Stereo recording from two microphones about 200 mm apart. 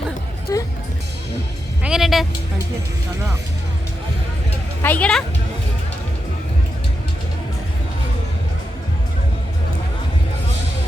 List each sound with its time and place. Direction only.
0.5 s music: 15° left (ahead or behind)
1.8 s vehicle: centre (ahead or behind)
4.8 s speech: 5° left (ahead or behind)